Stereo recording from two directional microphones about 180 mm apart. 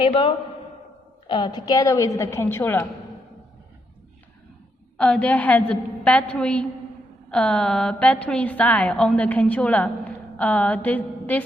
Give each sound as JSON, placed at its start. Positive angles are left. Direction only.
{"t": 0.0, "sound": "a man's voice", "side_deg": 30}
{"t": 4.9, "sound": "a woman's voice", "side_deg": 5}